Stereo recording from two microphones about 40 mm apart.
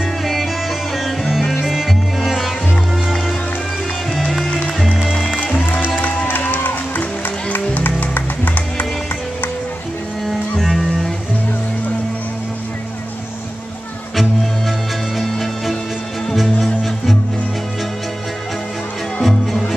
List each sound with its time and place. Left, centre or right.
0.2 s music: centre
4.1 s music: centre
4.5 s music: left
4.9 s music: centre
5.3 s music: left
6.2 s music: left
7.0 s music: left
10.6 s music: centre
15.1 s music: centre
19.2 s music: centre